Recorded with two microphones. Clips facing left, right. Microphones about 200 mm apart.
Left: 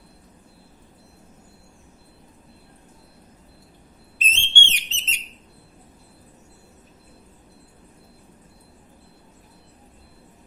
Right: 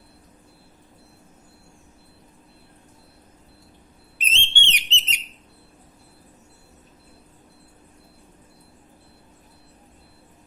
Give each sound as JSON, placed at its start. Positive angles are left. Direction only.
{"t": 4.3, "sound": "whistle", "side_deg": -15}